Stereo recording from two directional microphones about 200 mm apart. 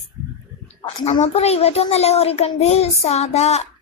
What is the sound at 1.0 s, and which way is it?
Child singing, 30° left (ahead or behind).